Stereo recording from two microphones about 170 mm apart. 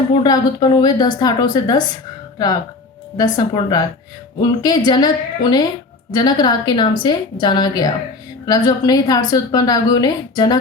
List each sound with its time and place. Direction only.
0.2 s a woman's voice: 25° left (ahead or behind)
3.3 s a woman's voice: 25° left (ahead or behind)